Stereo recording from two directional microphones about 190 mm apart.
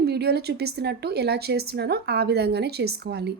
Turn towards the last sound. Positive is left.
turn(degrees=-60)  # may be behind; listen again after turning